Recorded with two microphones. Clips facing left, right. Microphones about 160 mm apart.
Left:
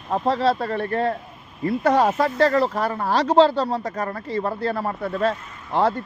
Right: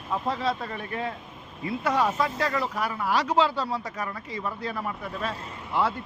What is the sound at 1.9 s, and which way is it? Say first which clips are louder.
Speech: left 5 dB; 40° left (ahead or behind).